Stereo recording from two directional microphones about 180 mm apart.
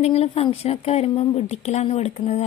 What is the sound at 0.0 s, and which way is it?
Speech, 35° left (ahead or behind).